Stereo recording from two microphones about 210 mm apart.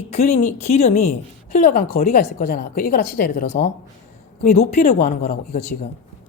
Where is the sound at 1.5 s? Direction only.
45° left (ahead or behind).